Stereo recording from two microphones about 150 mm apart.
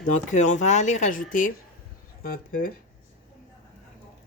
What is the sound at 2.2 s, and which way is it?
Speech, 75° left (ahead or behind).